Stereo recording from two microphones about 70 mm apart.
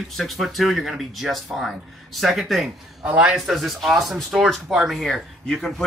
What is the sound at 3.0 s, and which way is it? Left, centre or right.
Speech, centre.